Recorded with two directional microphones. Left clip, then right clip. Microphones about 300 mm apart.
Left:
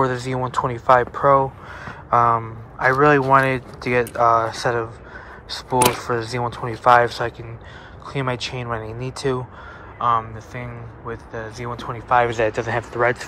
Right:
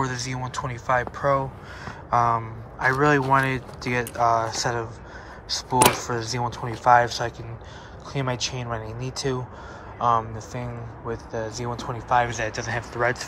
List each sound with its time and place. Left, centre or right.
0.0 s a man's voice: centre